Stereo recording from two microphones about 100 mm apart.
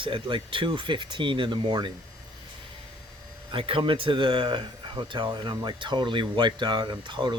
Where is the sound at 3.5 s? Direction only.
65° right (ahead or behind).